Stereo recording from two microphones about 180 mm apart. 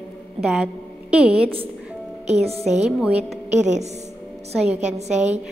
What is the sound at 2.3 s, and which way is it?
Speech, 35° right (ahead or behind).